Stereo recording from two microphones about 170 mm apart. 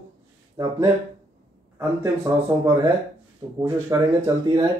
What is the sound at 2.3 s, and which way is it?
Speech, 15° right (ahead or behind).